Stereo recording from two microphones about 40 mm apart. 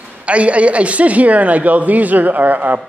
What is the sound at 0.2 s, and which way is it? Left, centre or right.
A woman's voice, right.